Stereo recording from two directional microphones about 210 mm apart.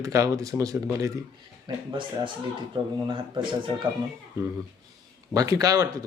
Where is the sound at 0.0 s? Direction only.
15° right (ahead or behind).